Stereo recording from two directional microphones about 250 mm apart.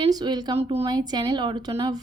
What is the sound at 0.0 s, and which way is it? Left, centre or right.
A woman's voice, centre.